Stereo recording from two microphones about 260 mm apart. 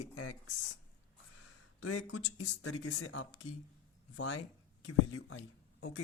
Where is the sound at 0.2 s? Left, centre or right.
Left.